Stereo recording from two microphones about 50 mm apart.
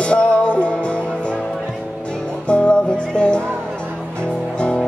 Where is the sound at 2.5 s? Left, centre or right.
Left.